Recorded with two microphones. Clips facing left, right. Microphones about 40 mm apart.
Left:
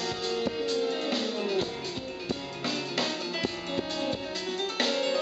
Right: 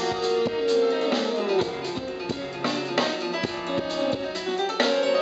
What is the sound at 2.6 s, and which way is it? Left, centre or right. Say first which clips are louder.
Music: right 6 dB; centre.